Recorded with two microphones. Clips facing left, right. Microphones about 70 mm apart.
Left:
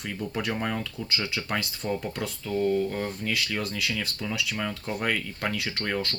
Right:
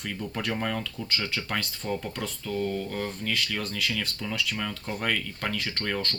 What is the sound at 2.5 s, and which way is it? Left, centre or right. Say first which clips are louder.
Speech: left 5 dB; centre.